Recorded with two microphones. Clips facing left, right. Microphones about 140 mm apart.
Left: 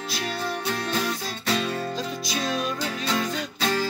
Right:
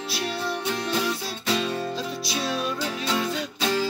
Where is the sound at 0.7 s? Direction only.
15° right (ahead or behind).